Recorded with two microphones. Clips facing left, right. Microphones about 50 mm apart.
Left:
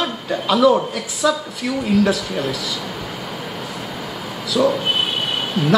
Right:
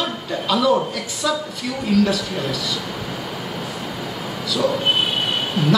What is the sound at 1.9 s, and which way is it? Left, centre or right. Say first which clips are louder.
Speech: even; left.